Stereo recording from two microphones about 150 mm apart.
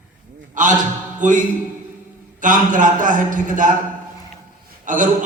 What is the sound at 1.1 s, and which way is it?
Music, 60° right (ahead or behind).